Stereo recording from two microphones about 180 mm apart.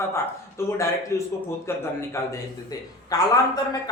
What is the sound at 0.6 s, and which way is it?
A man's voice, 15° left (ahead or behind).